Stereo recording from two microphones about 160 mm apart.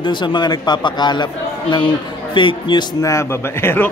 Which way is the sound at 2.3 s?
30° left (ahead or behind).